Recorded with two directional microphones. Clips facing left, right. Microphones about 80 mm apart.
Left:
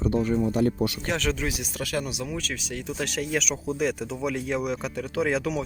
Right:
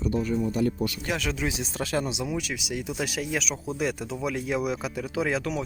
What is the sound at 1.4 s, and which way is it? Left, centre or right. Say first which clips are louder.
Speech: right 1 dB; right.